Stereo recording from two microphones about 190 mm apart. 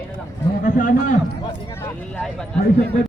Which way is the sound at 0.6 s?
45° left (ahead or behind).